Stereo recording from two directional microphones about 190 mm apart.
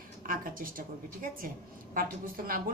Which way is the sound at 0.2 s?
50° right (ahead or behind).